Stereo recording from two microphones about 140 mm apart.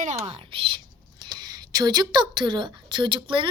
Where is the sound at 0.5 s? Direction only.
40° right (ahead or behind).